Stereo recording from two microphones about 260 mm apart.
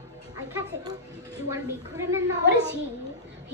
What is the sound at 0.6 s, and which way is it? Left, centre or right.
Speech, centre.